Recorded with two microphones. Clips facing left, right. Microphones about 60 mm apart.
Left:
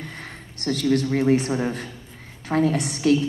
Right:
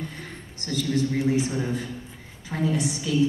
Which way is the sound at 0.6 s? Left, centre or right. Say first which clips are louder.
Left 4 dB; left.